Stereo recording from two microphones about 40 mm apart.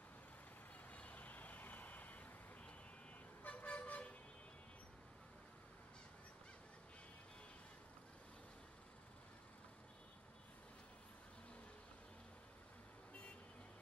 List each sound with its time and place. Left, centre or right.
0.9 s vehicle: left